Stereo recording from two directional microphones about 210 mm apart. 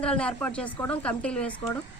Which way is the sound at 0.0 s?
5° left (ahead or behind).